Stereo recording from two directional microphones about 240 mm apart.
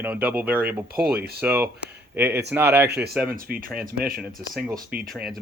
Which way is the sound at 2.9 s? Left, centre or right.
Right.